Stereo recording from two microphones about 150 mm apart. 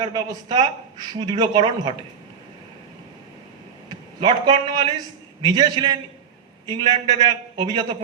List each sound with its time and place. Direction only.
0.0 s speech: 25° right (ahead or behind)
3.8 s a man's voice: 30° right (ahead or behind)